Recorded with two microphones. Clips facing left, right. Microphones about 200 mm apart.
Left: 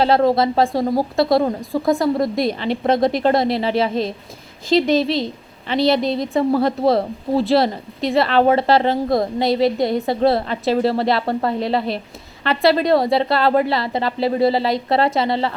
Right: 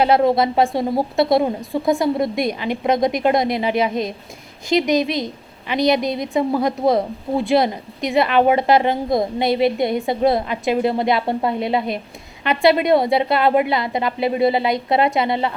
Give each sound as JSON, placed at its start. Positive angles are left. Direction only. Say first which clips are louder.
{"t": 0.0, "sound": "a woman's voice", "louder": "even", "side_deg": -20}
{"t": 1.5, "sound": "a woman's voice", "louder": "left 1 dB", "side_deg": 0}
{"t": 2.1, "sound": "a woman's voice", "louder": "left 1 dB", "side_deg": -20}